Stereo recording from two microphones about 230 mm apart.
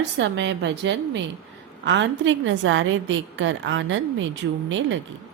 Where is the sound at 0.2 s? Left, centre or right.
Right.